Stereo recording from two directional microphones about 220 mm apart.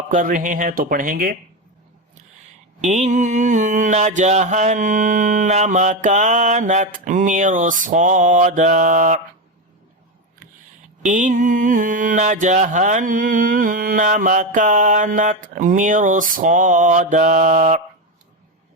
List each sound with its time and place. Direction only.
0.1 s mantra: 35° right (ahead or behind)
2.8 s mantra: 30° right (ahead or behind)
11.0 s mantra: 35° right (ahead or behind)